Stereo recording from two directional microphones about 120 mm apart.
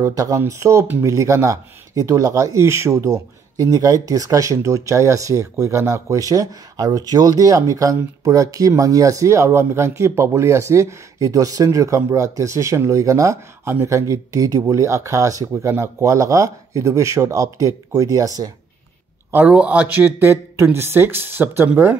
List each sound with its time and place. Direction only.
0.0 s speech: 30° right (ahead or behind)
19.3 s speech: 10° right (ahead or behind)